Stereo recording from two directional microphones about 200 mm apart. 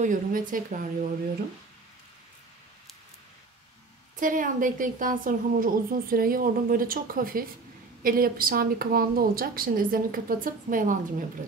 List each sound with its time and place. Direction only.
0.0 s speech: 40° right (ahead or behind)
4.2 s speech: 40° right (ahead or behind)